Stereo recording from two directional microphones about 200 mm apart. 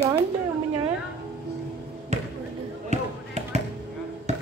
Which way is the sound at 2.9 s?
35° right (ahead or behind).